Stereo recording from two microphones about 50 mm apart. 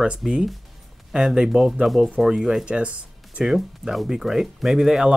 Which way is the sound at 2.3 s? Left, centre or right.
Centre.